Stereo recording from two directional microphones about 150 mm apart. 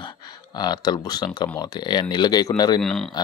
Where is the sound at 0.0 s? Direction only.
30° left (ahead or behind).